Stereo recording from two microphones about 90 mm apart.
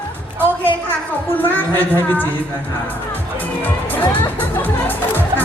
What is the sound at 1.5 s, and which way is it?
Speech, 25° left (ahead or behind).